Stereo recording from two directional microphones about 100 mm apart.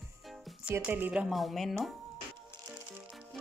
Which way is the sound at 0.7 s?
15° right (ahead or behind).